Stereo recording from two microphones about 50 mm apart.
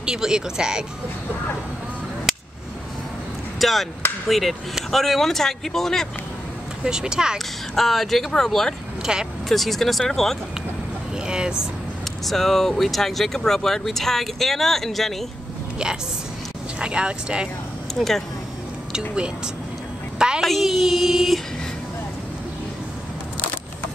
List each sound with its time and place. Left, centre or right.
0.0 s speech: centre
3.5 s speech: centre
6.8 s speech: centre
7.3 s speech: centre
9.0 s speech: centre
9.5 s speech: centre
11.2 s speech: centre
12.3 s speech: centre
16.8 s speech: centre
17.9 s speech: centre
18.9 s speech: centre
20.2 s a sound: centre
20.4 s speech: centre